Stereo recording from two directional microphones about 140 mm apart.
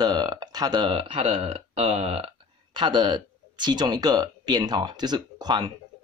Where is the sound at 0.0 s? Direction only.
30° right (ahead or behind); by 2.3 s 45° right (ahead or behind).